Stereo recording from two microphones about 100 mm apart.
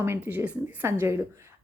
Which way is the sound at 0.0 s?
20° right (ahead or behind).